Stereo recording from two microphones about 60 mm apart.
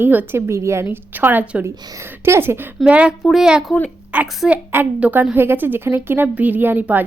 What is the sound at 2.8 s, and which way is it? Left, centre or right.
A woman's voice, centre.